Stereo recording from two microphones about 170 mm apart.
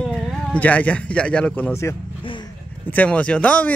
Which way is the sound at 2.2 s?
30° left (ahead or behind).